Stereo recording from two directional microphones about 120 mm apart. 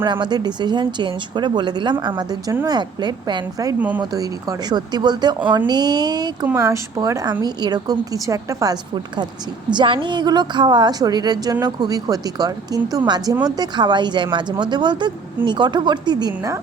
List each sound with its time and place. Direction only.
0.0 s speech: 40° right (ahead or behind)
3.8 s speech: 10° right (ahead or behind)
4.0 s speech: 30° right (ahead or behind)